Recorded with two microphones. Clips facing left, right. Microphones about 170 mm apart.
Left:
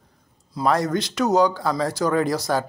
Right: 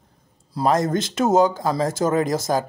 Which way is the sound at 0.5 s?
25° right (ahead or behind).